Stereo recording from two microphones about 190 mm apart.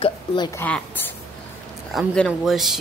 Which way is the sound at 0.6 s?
5° left (ahead or behind).